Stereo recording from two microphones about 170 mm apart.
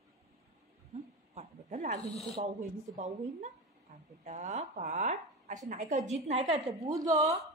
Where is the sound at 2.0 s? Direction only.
40° left (ahead or behind).